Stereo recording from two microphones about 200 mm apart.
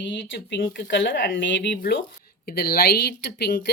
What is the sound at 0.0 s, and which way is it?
Speech, 65° left (ahead or behind).